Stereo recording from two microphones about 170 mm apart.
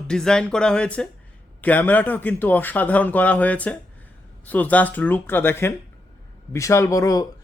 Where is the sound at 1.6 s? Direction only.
10° left (ahead or behind).